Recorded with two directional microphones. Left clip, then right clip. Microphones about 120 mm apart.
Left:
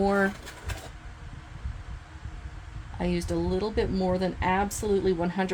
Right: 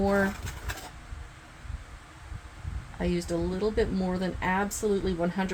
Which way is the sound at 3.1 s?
70° left (ahead or behind).